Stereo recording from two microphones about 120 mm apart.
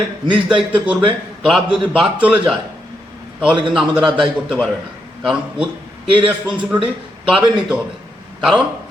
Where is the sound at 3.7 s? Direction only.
5° right (ahead or behind).